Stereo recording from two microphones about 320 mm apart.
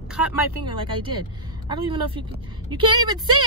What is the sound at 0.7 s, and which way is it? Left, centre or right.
A woman's voice, centre.